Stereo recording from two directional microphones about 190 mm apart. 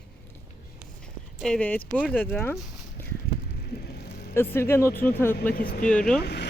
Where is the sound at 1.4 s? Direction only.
5° left (ahead or behind).